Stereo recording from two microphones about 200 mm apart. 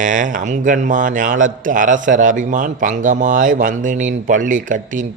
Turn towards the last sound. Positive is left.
turn(degrees=-40)  # may be behind; listen again after turning